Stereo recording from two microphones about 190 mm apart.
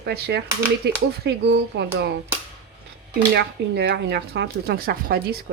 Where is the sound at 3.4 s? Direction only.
60° right (ahead or behind).